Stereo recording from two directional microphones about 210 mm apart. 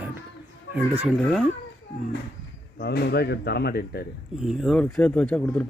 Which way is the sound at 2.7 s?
50° left (ahead or behind).